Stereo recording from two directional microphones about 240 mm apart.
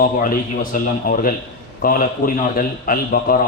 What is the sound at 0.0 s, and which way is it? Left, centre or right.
A man's voice, left.